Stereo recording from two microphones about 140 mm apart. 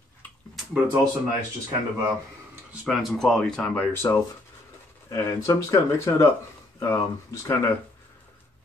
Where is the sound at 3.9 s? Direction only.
15° left (ahead or behind).